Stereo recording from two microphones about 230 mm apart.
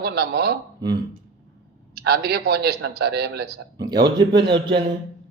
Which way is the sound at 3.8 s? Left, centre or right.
Centre.